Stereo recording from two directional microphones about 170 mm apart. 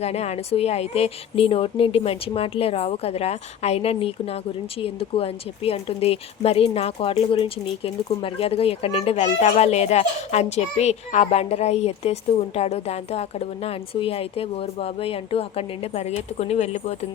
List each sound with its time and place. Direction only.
0.0 s speech: 40° left (ahead or behind)